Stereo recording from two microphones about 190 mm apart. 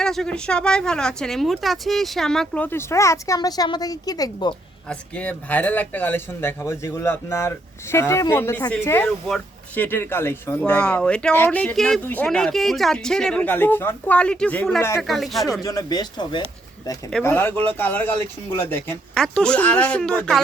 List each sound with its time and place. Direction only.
0.0 s speech: centre (ahead or behind); by 4.5 s 20° left (ahead or behind)
4.9 s speech: 5° left (ahead or behind)
15.0 s speech: centre (ahead or behind)
15.6 s speech: 20° left (ahead or behind)
17.1 s speech: 5° left (ahead or behind)